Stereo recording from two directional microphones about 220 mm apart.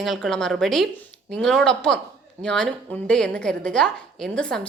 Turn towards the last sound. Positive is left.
turn(degrees=5)  # may be behind; listen again after turning